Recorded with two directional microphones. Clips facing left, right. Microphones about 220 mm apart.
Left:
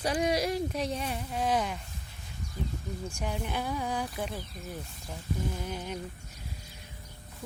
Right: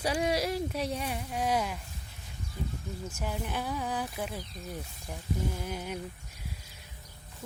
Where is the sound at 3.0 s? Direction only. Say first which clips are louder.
Left 1 dB; 5° right (ahead or behind).